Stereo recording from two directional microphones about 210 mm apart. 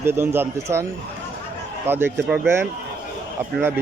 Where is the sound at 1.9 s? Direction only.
10° right (ahead or behind).